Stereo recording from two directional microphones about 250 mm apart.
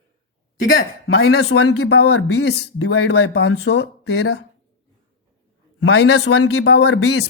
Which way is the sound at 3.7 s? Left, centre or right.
Left.